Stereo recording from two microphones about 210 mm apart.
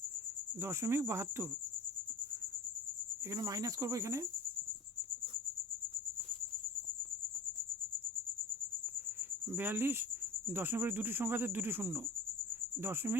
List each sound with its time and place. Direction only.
0.6 s speech: 15° right (ahead or behind)
3.2 s speech: 15° right (ahead or behind)
9.5 s speech: 10° right (ahead or behind)